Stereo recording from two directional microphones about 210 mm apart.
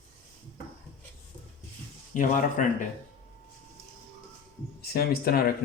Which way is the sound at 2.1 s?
40° left (ahead or behind).